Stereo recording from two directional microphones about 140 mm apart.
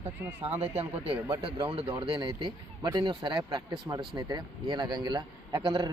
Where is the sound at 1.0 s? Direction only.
40° right (ahead or behind).